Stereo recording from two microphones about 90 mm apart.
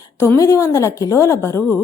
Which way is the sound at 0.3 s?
35° left (ahead or behind).